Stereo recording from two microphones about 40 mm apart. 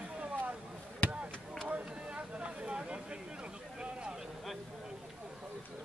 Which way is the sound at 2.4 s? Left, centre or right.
Right.